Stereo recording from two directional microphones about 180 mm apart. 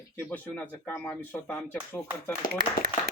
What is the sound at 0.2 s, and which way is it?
A man's voice, 10° left (ahead or behind).